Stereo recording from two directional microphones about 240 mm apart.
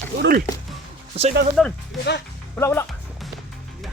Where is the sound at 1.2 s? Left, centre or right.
Right.